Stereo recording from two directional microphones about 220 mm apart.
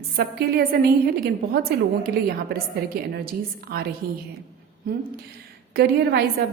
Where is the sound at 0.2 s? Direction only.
45° right (ahead or behind).